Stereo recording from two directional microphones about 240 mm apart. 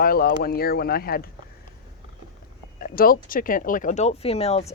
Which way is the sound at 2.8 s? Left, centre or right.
Left.